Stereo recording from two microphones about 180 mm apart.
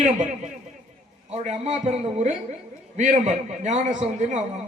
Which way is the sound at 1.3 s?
40° right (ahead or behind).